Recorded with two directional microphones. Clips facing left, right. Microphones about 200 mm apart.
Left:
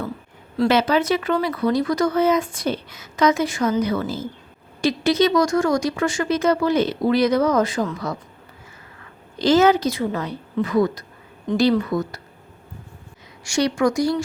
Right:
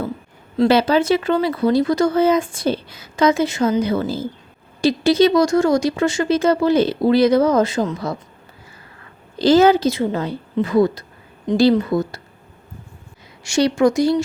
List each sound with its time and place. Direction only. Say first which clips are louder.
0.7 s speech: right 3 dB; 30° right (ahead or behind)
9.4 s speech: right 3 dB; 35° right (ahead or behind)
13.4 s speech: right 4 dB; 25° right (ahead or behind)